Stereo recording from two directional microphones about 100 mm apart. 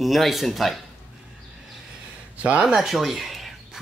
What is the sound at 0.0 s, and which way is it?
Speech, centre (ahead or behind).